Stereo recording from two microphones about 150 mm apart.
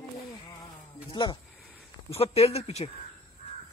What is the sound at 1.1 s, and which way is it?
Speech, 30° left (ahead or behind).